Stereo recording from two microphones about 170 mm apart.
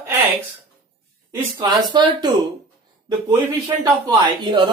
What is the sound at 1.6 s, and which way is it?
Speech, 25° right (ahead or behind).